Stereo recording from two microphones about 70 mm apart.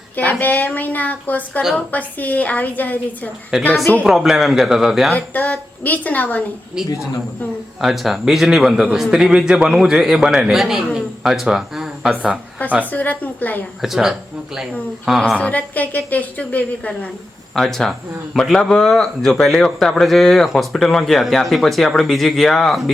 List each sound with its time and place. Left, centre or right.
0.2 s a woman's voice: left
3.5 s a man's voice: centre
5.1 s a woman's voice: left
6.8 s a man's voice: centre
12.8 s a woman's voice: left
13.8 s a man's voice: centre
15.4 s a woman's voice: left
17.5 s a man's voice: centre